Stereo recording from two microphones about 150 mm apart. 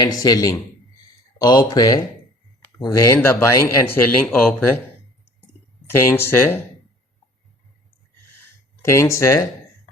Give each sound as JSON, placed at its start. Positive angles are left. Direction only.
{"t": 0.0, "sound": "speech", "side_deg": 25}
{"t": 6.1, "sound": "speech", "side_deg": 15}
{"t": 8.8, "sound": "speech", "side_deg": 20}